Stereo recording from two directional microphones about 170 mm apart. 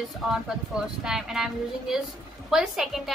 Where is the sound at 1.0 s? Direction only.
5° right (ahead or behind).